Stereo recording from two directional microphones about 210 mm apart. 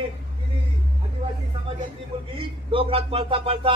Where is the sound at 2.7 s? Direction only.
25° right (ahead or behind).